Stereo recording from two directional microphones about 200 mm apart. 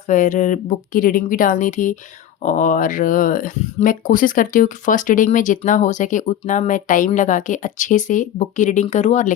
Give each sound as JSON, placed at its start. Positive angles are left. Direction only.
{"t": 0.1, "sound": "speech", "side_deg": 40}